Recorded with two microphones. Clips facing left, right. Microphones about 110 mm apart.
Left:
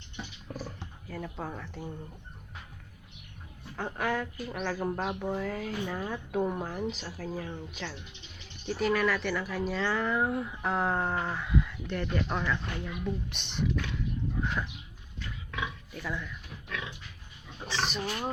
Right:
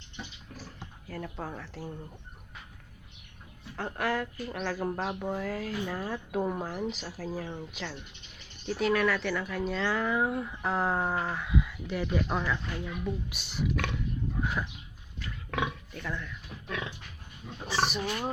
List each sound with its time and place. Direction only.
1.0 s speech: centre (ahead or behind)
3.8 s speech: centre (ahead or behind)
14.4 s a sound: 5° right (ahead or behind)
15.4 s pig: 60° right (ahead or behind)
15.9 s speech: 5° left (ahead or behind)
17.6 s speech: 5° right (ahead or behind)